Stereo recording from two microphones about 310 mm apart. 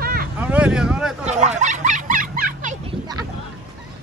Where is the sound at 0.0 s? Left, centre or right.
Right.